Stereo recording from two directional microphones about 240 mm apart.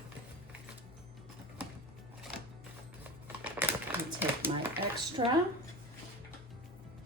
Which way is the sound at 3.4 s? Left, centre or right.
Centre.